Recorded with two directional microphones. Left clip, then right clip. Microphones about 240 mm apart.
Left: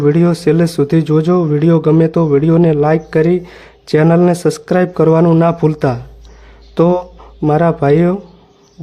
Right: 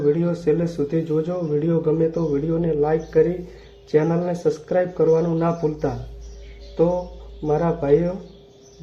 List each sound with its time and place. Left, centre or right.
0.0 s speech: left
7.4 s speech: left